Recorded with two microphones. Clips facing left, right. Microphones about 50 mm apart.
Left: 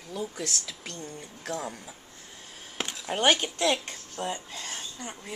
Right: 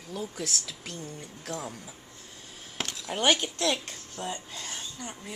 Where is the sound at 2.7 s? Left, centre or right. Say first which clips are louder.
Left 2 dB; centre.